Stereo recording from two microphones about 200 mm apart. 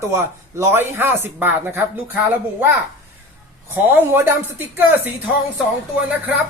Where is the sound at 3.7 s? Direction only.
10° right (ahead or behind).